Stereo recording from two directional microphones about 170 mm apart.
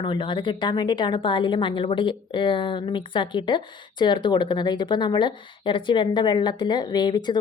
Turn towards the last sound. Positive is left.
turn(degrees=25)  # may be behind; listen again after turning